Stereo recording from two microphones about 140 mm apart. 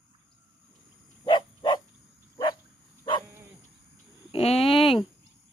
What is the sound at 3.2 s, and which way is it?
Dog, 15° right (ahead or behind).